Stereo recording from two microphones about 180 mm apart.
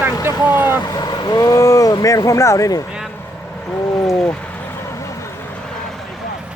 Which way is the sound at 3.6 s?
10° left (ahead or behind).